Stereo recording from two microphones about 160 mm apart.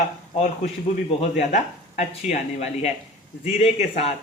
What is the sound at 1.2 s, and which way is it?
Speech, 45° left (ahead or behind).